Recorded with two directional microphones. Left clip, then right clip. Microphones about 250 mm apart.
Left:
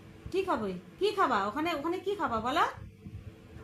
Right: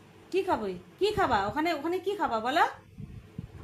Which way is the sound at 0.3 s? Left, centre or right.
Right.